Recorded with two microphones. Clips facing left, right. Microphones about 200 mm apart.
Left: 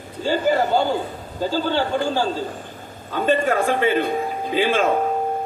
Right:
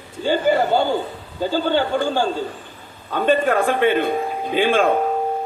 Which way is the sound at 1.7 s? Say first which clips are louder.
Right 2 dB; 50° right (ahead or behind).